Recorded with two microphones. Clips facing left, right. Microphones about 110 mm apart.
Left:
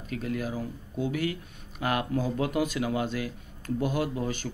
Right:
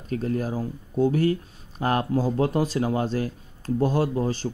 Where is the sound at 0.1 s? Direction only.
35° right (ahead or behind).